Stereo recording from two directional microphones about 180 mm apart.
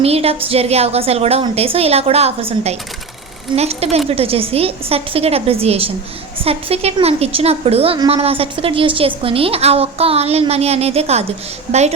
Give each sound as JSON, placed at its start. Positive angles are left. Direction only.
{"t": 0.0, "sound": "a woman's voice", "side_deg": -35}